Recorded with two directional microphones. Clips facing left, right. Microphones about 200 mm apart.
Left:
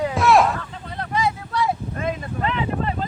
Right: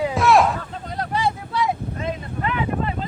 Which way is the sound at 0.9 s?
35° right (ahead or behind).